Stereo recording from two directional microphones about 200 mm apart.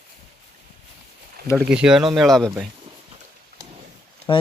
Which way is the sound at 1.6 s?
5° right (ahead or behind).